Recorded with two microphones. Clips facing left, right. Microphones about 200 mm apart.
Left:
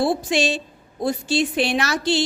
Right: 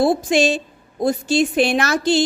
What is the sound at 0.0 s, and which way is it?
A woman's voice, 45° right (ahead or behind).